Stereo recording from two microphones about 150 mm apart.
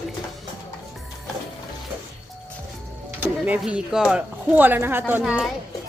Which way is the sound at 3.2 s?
10° right (ahead or behind).